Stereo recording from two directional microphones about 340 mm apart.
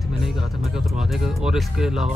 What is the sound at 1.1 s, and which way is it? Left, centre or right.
Speech, centre.